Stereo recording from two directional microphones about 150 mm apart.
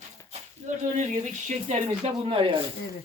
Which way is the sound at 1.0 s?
55° right (ahead or behind).